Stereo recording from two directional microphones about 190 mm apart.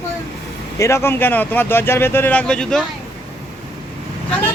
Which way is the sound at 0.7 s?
15° left (ahead or behind).